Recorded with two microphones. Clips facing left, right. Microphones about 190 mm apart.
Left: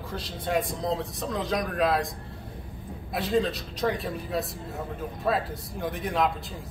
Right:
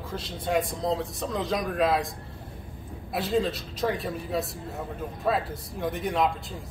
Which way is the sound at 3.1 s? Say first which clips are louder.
Even; centre (ahead or behind).